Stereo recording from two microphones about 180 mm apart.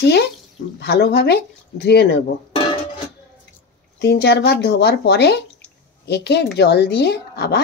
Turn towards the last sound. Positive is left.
turn(degrees=65)  # may be behind; listen again after turning